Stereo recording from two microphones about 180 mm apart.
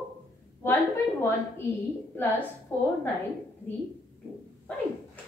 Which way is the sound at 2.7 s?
10° left (ahead or behind).